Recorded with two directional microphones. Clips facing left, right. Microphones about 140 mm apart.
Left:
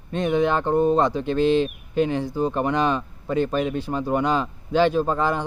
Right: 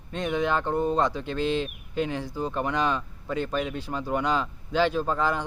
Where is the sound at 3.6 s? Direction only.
50° left (ahead or behind).